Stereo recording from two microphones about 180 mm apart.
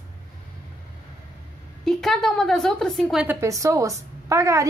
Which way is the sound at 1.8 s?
Centre (ahead or behind).